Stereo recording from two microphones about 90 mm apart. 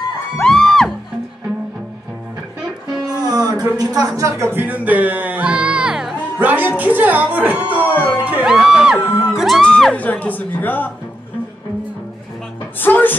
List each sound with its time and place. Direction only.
0.4 s music: 5° left (ahead or behind)
3.2 s a sound: 45° right (ahead or behind)
3.7 s speech: 45° right (ahead or behind); by 6.1 s 5° right (ahead or behind)
6.4 s a woman's voice: 20° right (ahead or behind)
7.7 s howl: 20° right (ahead or behind)
8.5 s music: 5° right (ahead or behind)
9.9 s a woman's voice: 20° left (ahead or behind)
12.8 s a woman's voice: 20° left (ahead or behind)